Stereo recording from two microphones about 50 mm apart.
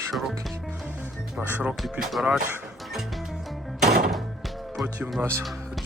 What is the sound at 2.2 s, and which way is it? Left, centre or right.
Speech, right.